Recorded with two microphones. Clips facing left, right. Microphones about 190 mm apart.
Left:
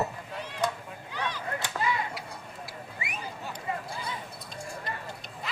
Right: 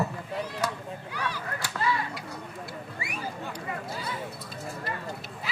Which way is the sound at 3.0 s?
20° left (ahead or behind).